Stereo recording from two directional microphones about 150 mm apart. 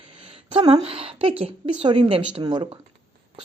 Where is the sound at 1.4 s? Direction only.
35° right (ahead or behind).